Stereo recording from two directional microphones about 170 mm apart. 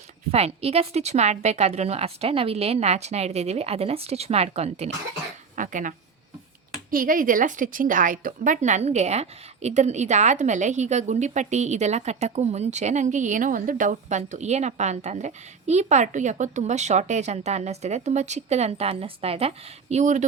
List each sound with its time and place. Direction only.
0.3 s a woman's voice: 35° right (ahead or behind)
5.5 s a sound: 50° right (ahead or behind)
6.9 s a woman's voice: 55° right (ahead or behind)